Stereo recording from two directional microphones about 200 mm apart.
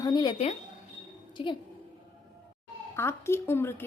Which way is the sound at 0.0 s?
20° left (ahead or behind).